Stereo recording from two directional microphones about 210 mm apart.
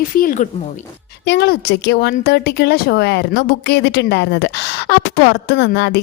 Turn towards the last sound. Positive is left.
turn(degrees=55)  # may be behind; listen again after turning